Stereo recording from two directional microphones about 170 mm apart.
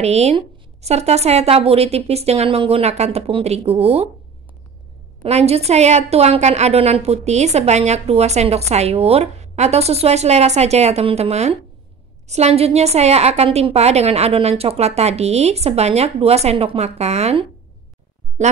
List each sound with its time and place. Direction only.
0.0 s a woman's voice: 40° right (ahead or behind)
5.2 s a woman's voice: 35° right (ahead or behind)